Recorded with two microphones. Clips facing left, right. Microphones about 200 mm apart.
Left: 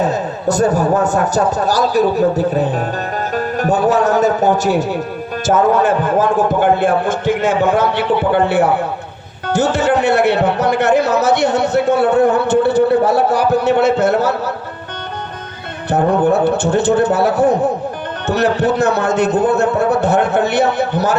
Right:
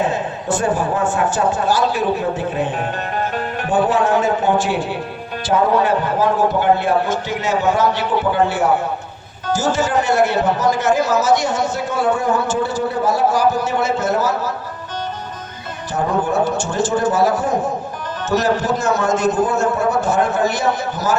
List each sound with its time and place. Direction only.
0.0 s a man's voice: 40° left (ahead or behind); by 14.5 s 60° left (ahead or behind)
15.9 s speech: 60° left (ahead or behind)